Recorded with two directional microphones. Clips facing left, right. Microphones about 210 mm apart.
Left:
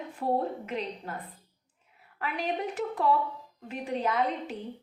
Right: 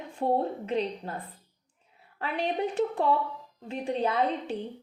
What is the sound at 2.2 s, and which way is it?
A woman's voice, 30° right (ahead or behind).